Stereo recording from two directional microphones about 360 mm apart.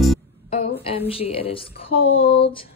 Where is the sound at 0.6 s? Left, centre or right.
Centre.